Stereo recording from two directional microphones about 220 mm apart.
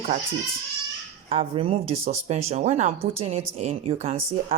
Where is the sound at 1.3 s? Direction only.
25° right (ahead or behind).